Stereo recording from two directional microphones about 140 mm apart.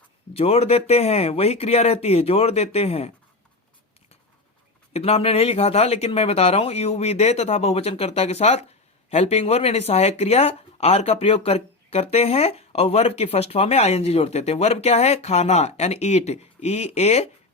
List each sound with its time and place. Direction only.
0.3 s speech: 45° left (ahead or behind)
4.9 s speech: 45° left (ahead or behind)